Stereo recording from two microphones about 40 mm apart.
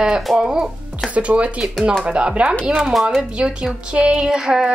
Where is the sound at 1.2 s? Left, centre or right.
Right; by 4.7 s centre.